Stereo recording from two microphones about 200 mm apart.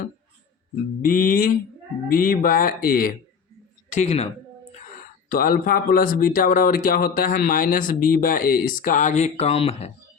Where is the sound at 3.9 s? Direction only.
35° left (ahead or behind).